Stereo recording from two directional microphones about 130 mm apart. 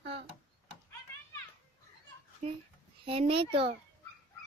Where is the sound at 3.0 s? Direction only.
45° right (ahead or behind).